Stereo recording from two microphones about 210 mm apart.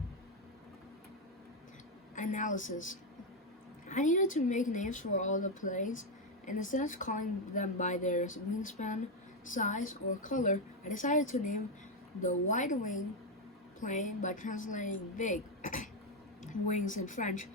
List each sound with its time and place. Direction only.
2.1 s a woman's voice: 35° left (ahead or behind)
3.8 s speech: 35° left (ahead or behind)